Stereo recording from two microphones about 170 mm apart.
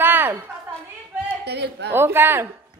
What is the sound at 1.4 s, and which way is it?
Speech, 80° right.